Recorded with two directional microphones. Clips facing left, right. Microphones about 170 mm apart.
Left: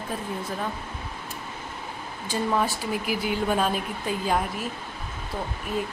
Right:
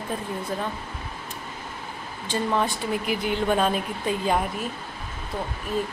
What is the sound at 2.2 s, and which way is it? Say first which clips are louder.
Speech: right 1 dB; 5° left (ahead or behind).